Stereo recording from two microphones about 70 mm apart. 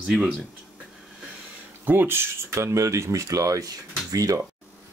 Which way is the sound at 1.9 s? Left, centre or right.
Right.